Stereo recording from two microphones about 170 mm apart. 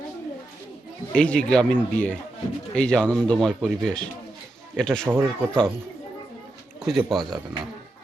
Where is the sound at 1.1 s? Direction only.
5° left (ahead or behind).